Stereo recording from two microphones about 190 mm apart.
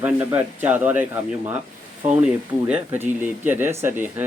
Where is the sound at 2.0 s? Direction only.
5° right (ahead or behind).